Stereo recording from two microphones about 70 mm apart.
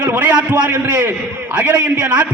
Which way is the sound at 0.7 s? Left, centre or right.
Right.